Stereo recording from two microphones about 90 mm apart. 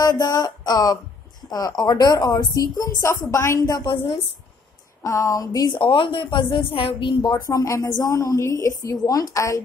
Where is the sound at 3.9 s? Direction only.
90° left.